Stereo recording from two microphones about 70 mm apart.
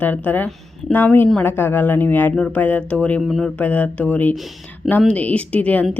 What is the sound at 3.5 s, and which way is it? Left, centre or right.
Speech, left.